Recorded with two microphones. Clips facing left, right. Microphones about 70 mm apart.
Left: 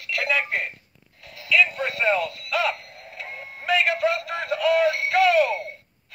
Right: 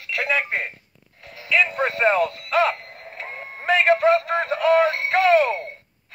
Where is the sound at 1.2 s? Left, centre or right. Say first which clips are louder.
Even; right.